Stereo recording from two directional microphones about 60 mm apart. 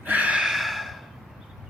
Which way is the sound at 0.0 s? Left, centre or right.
Right.